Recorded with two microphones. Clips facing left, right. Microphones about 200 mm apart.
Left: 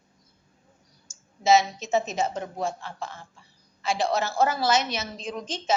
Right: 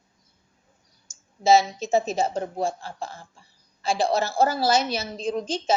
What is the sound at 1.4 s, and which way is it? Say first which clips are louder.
A woman's voice: right 2 dB; 30° right (ahead or behind).